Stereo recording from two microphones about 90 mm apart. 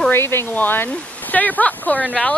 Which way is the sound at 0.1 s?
25° left (ahead or behind).